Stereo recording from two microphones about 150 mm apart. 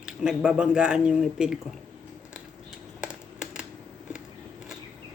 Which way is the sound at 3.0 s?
5° right (ahead or behind).